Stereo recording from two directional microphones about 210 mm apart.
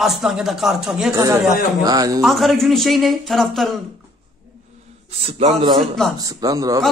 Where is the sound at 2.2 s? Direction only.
Centre (ahead or behind).